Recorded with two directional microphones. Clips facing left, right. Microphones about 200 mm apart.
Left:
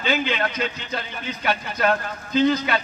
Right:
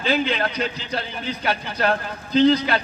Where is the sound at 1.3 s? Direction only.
35° right (ahead or behind).